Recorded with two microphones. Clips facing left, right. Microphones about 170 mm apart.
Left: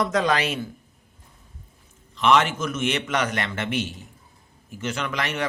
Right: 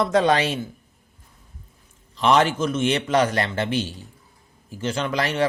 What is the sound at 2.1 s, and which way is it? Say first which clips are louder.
Speech: right 1 dB; 35° right (ahead or behind).